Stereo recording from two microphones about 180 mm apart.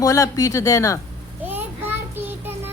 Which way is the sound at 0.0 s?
15° left (ahead or behind).